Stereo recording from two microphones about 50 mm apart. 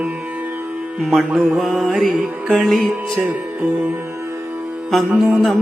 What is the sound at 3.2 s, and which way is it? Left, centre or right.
Music, right.